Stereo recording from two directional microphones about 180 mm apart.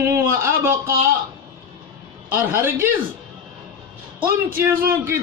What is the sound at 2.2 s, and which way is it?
Speech, 15° right (ahead or behind).